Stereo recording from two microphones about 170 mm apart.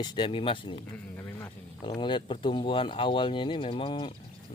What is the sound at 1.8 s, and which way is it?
Speech, 30° left (ahead or behind).